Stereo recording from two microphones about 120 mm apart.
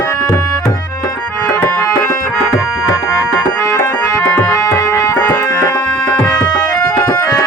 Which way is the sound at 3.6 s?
25° left (ahead or behind).